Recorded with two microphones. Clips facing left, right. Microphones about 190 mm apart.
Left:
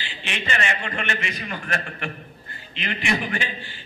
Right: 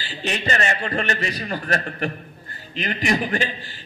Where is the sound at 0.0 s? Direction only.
40° right (ahead or behind).